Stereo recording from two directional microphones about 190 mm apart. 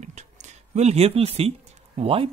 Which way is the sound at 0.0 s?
35° right (ahead or behind).